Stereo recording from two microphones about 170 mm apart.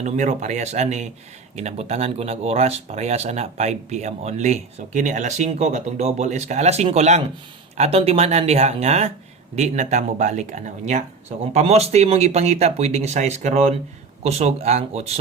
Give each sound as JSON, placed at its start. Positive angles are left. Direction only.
{"t": 0.0, "sound": "speech", "side_deg": -45}